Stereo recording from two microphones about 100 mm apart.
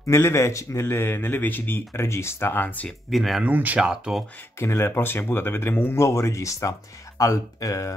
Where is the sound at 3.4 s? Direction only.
15° right (ahead or behind).